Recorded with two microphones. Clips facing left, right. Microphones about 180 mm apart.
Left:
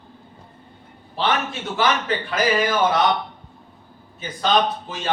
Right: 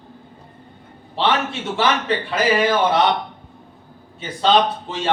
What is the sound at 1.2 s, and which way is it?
A man's voice, 25° right (ahead or behind).